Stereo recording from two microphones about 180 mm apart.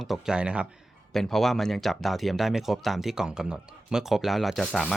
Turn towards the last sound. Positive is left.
turn(degrees=5)  # may be behind; listen again after turning